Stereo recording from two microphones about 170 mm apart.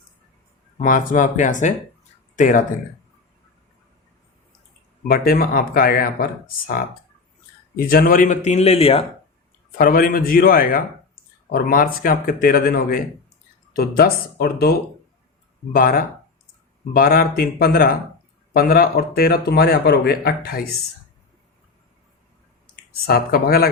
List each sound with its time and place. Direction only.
0.8 s speech: 50° left (ahead or behind)
5.0 s speech: 60° left (ahead or behind)
7.8 s speech: 60° left (ahead or behind); by 9.0 s 35° left (ahead or behind)
9.7 s speech: 55° left (ahead or behind)
22.7 s speech: 65° left (ahead or behind)